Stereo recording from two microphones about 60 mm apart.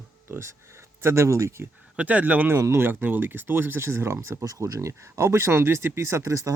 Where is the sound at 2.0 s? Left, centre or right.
Right.